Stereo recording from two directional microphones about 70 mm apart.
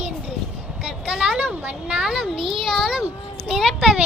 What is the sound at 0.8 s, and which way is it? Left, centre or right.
Speech, centre.